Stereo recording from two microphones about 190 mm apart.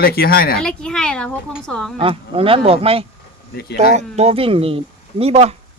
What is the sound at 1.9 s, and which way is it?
Speech, 30° right (ahead or behind).